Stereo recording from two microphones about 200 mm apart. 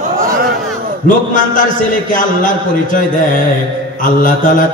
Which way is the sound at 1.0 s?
40° left (ahead or behind).